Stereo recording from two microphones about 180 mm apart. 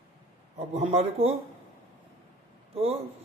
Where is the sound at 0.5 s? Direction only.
35° right (ahead or behind).